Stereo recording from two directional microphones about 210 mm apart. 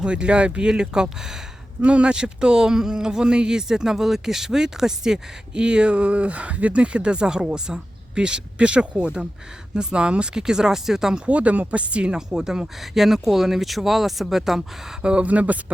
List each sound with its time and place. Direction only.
0.0 s speech: 5° right (ahead or behind)